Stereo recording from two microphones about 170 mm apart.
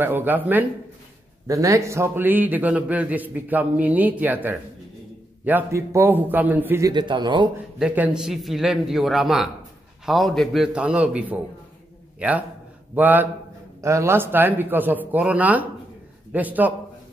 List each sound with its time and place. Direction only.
0.0 s a man's voice: 10° right (ahead or behind)
6.9 s speech: 25° right (ahead or behind)
7.8 s a man's voice: 5° right (ahead or behind)